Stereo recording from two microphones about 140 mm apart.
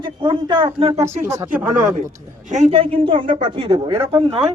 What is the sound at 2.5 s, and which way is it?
Speech, 50° right (ahead or behind).